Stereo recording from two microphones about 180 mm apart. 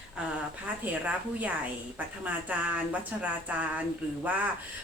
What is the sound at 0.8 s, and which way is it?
Speech, 10° right (ahead or behind).